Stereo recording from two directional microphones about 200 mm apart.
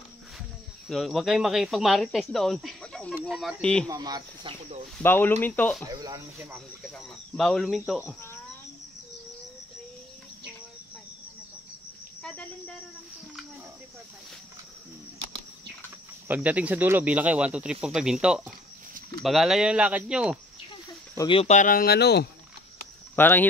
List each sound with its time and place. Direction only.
0.8 s speech: centre (ahead or behind)
3.8 s speech: 20° right (ahead or behind)
4.9 s speech: 10° left (ahead or behind)
5.9 s speech: 20° right (ahead or behind)
6.9 s speech: 5° left (ahead or behind)
12.2 s cricket: 5° left (ahead or behind)
16.3 s speech: 5° right (ahead or behind)
21.2 s speech: 25° left (ahead or behind); by 22.3 s 55° left (ahead or behind)
23.1 s speech: 10° left (ahead or behind)